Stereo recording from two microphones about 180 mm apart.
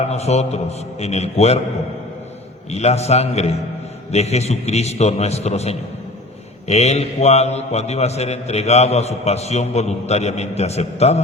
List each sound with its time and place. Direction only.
0.0 s a man's voice: 35° left (ahead or behind)
2.7 s a man's voice: 35° left (ahead or behind)